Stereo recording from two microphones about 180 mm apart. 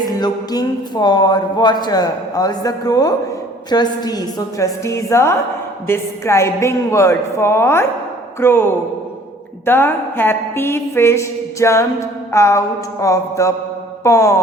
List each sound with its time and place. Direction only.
0.2 s a woman's voice: 20° left (ahead or behind)